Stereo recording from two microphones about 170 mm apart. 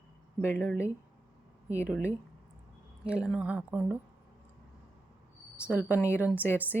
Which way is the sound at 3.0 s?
5° right (ahead or behind).